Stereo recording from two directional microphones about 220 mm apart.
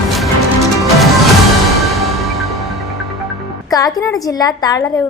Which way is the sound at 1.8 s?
Centre (ahead or behind).